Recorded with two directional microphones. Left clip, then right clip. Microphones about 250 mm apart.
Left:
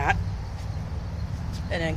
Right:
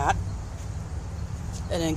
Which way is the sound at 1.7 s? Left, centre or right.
Right.